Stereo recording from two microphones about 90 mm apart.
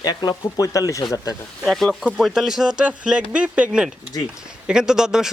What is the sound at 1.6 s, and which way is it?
Speech, centre (ahead or behind).